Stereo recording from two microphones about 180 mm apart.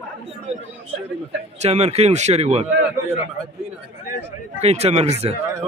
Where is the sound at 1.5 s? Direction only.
35° right (ahead or behind).